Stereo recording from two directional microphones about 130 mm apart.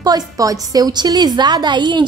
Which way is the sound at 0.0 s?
30° right (ahead or behind).